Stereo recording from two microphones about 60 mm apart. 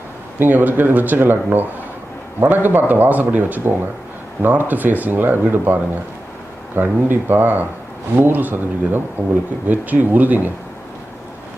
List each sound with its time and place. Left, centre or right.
0.3 s a man's voice: right